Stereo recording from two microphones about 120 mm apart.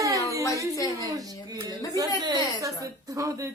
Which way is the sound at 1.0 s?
30° right (ahead or behind).